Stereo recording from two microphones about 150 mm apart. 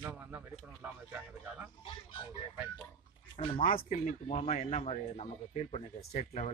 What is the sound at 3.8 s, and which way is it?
A man's voice, 55° left (ahead or behind).